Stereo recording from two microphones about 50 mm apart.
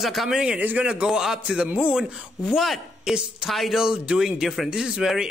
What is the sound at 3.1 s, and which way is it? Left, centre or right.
Speech, centre.